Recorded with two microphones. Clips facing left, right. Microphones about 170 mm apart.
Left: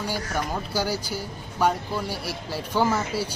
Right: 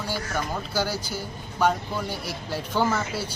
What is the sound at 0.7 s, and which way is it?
Speech, 10° left (ahead or behind).